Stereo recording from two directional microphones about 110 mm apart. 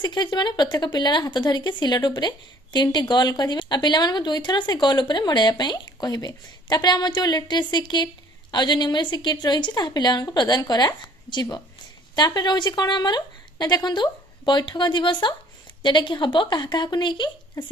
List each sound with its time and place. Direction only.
0.1 s speech: 45° left (ahead or behind)